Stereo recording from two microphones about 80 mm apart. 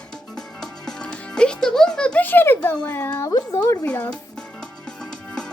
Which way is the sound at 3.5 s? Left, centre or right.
Left.